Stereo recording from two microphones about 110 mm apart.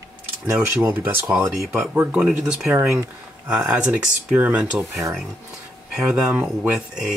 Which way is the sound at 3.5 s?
10° right (ahead or behind).